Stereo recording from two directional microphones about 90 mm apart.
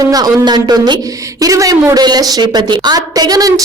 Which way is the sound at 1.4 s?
40° right (ahead or behind).